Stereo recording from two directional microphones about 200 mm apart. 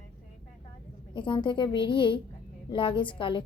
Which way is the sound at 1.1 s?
25° left (ahead or behind).